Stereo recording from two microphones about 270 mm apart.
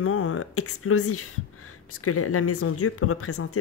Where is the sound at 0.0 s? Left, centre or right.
Left.